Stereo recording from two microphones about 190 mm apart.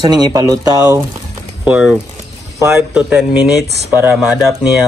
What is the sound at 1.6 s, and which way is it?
Speech, 5° right (ahead or behind).